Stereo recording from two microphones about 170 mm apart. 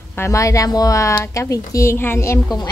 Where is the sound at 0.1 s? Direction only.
15° left (ahead or behind).